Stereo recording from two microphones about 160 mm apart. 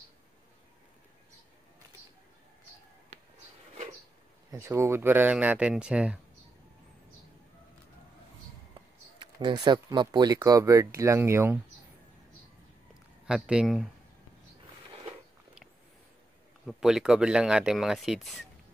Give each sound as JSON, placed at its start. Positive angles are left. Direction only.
{"t": 4.5, "sound": "speech", "side_deg": -20}
{"t": 9.2, "sound": "speech", "side_deg": -30}
{"t": 13.3, "sound": "speech", "side_deg": -5}
{"t": 16.6, "sound": "speech", "side_deg": -5}